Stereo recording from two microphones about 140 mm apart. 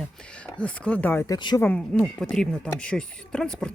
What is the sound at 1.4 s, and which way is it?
Speech, 30° left (ahead or behind).